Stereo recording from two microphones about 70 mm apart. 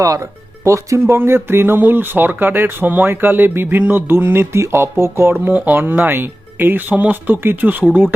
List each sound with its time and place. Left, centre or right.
0.0 s speech: right